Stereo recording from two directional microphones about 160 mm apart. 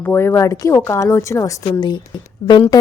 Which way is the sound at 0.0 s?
15° left (ahead or behind).